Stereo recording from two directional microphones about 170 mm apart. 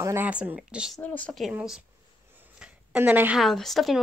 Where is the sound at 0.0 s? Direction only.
10° right (ahead or behind).